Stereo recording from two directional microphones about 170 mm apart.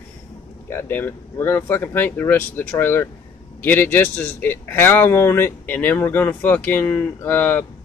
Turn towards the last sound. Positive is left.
turn(degrees=10)  # may be behind; listen again after turning